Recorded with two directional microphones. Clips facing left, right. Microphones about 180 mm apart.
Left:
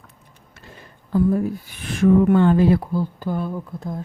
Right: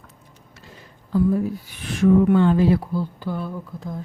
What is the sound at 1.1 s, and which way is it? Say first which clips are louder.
Speech: left 1 dB; 50° left (ahead or behind).